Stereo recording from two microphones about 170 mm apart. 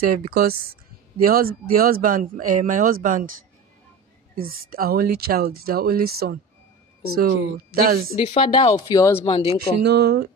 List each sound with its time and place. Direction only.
0.1 s speech: 60° right (ahead or behind)
4.4 s speech: 60° right (ahead or behind)
8.2 s speech: 35° left (ahead or behind)
8.7 s speech: 20° left (ahead or behind)
9.2 s speech: 35° left (ahead or behind)
9.8 s speech: 75° right (ahead or behind)